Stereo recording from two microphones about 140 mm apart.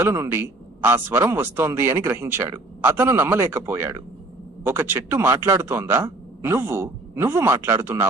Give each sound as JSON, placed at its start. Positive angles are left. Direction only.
{"t": 0.0, "sound": "a man's voice", "side_deg": -15}